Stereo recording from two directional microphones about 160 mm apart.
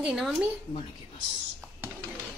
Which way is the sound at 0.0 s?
5° right (ahead or behind).